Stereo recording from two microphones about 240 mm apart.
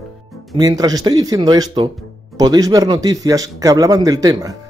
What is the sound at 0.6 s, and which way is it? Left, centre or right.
A man's voice, centre.